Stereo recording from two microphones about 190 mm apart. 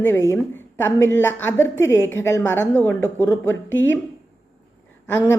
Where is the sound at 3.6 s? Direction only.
85° left.